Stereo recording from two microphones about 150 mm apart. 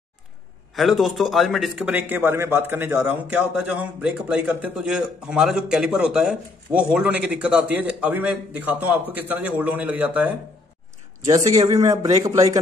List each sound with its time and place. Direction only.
0.7 s a man's voice: centre (ahead or behind)
11.2 s a man's voice: 25° right (ahead or behind)